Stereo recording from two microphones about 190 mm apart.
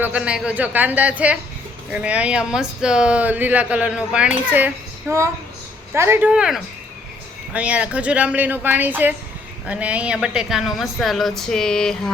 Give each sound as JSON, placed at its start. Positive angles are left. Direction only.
{"t": 0.0, "sound": "speech", "side_deg": -5}